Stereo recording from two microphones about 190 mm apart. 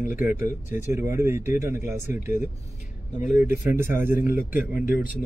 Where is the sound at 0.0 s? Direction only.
10° right (ahead or behind).